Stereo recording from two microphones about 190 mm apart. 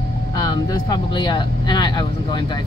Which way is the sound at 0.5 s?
20° left (ahead or behind).